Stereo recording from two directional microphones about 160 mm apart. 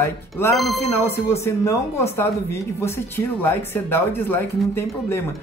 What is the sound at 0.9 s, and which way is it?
Speech, 15° left (ahead or behind).